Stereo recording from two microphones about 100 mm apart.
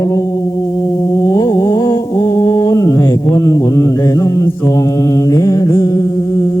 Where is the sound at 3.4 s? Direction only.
35° left (ahead or behind).